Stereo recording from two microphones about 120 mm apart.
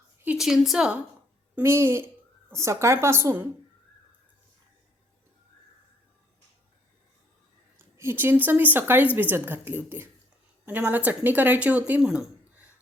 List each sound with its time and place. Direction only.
0.3 s a woman's voice: 5° right (ahead or behind)
1.5 s a woman's voice: 20° right (ahead or behind)
7.8 s a woman's voice: 20° right (ahead or behind)